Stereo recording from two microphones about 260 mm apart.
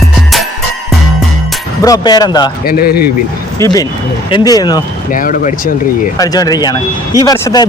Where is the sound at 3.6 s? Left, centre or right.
Centre.